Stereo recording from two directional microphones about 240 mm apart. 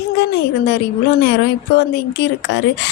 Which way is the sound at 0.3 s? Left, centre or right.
Left.